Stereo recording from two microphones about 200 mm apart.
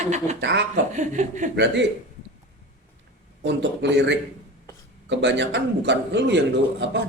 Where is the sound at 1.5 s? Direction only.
60° right (ahead or behind).